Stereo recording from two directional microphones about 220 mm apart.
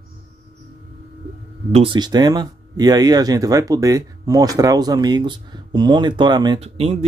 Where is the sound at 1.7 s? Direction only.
25° right (ahead or behind).